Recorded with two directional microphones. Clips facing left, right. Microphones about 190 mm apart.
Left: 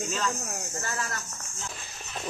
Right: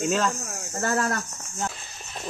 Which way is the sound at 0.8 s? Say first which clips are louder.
Right 14 dB; 55° right (ahead or behind).